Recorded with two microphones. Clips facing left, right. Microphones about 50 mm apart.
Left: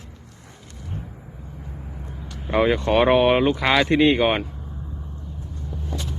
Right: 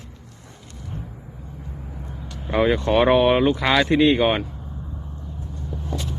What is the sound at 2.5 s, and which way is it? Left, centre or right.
Speech, left.